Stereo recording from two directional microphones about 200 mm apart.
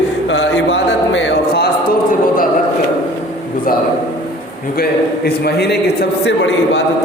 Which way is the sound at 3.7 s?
45° left (ahead or behind).